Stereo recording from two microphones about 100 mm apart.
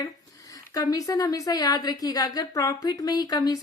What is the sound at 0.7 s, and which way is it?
A woman's voice, 35° left (ahead or behind).